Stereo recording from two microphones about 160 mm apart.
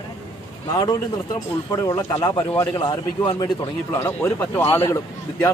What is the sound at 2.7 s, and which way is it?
Speech, 30° left (ahead or behind).